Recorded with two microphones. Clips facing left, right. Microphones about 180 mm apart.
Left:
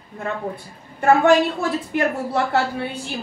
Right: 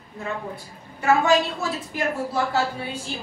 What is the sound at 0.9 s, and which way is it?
Speech, 50° left (ahead or behind).